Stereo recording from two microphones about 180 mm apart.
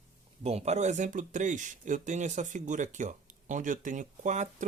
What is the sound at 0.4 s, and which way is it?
Speech, 35° right (ahead or behind).